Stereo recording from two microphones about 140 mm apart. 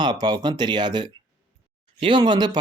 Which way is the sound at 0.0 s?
30° right (ahead or behind).